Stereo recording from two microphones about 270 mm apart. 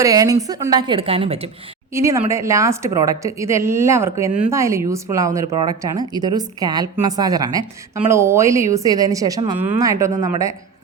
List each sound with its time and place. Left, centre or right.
0.0 s a woman's voice: centre
1.9 s a woman's voice: centre